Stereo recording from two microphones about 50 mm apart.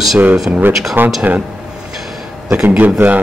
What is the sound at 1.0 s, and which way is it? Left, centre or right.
Speech, right.